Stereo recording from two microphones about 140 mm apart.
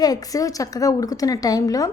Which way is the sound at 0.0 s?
25° left (ahead or behind).